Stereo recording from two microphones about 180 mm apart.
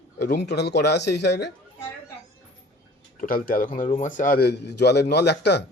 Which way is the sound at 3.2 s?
50° left (ahead or behind).